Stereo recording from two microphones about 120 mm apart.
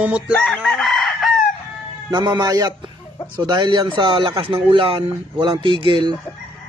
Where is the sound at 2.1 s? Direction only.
35° right (ahead or behind).